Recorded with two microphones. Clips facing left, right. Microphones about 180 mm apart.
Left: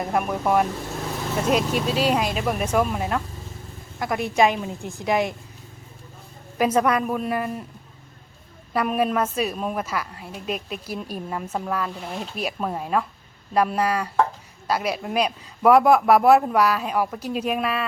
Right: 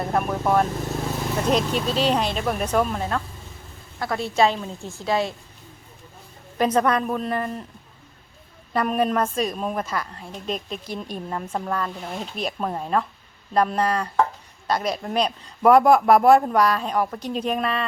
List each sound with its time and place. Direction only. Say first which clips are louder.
0.0 s a man's voice: even; 10° left (ahead or behind)
6.6 s a man's voice: even; 10° left (ahead or behind)
8.7 s a man's voice: even; 5° left (ahead or behind)